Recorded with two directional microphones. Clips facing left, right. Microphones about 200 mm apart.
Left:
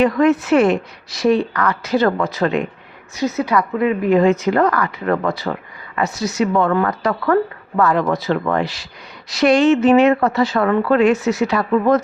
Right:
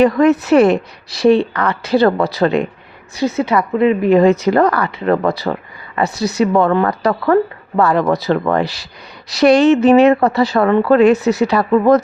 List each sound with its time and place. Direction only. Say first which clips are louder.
0.0 s speech: right 3 dB; 40° right (ahead or behind)